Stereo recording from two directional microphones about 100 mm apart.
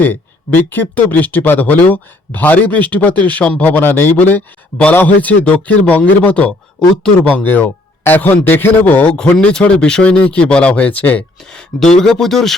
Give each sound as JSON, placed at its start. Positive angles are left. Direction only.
{"t": 0.0, "sound": "speech", "side_deg": 20}